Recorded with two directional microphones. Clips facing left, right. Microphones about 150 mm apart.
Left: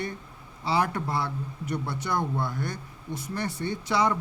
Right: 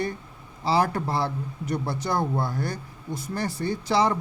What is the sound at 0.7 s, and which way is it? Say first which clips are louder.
Speech: right 3 dB; 35° right (ahead or behind).